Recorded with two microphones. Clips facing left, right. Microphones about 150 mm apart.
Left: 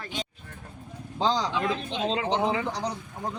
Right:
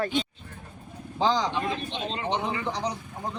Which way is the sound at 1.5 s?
90° left.